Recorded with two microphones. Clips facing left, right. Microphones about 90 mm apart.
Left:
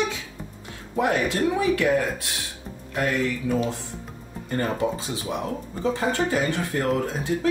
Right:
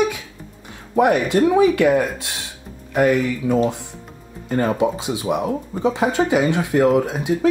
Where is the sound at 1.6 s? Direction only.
75° right (ahead or behind).